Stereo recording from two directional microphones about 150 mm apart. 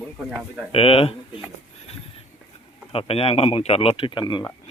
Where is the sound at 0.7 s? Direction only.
40° left (ahead or behind).